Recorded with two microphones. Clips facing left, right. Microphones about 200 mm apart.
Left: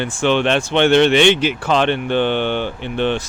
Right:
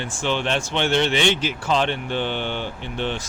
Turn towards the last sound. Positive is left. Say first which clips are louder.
# left 7 dB
turn(degrees=65)  # may be behind; listen again after turning